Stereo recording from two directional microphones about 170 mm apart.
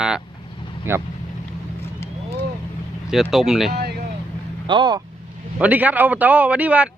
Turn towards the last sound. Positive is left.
turn(degrees=-10)  # may be behind; listen again after turning